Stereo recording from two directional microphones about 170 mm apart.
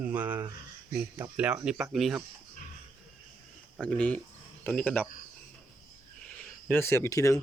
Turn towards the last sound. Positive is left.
turn(degrees=20)  # may be behind; listen again after turning